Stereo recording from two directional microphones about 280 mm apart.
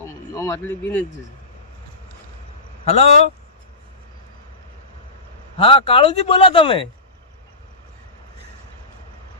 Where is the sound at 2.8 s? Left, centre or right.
Left.